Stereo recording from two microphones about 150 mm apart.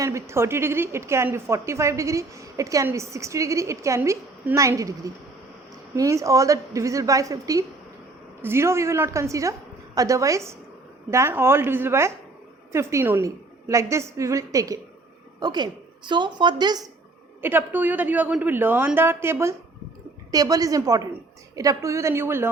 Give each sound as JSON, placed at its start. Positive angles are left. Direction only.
{"t": 0.0, "sound": "a woman's voice", "side_deg": -20}
{"t": 17.4, "sound": "a woman's voice", "side_deg": -15}